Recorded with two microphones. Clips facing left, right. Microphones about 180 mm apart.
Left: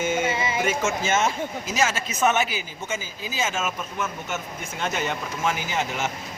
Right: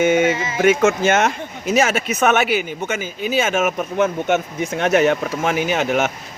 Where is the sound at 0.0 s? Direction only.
65° right (ahead or behind).